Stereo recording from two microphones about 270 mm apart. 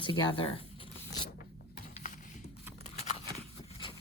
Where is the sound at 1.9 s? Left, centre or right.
Left.